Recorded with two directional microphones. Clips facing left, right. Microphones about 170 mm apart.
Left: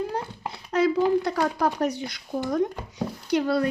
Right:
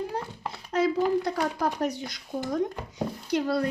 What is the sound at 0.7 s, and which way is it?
Speech, 70° left (ahead or behind).